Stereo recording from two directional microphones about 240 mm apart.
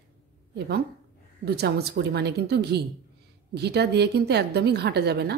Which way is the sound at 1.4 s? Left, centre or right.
Right.